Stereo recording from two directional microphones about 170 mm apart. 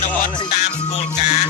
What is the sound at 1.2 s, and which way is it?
Music, 40° left (ahead or behind).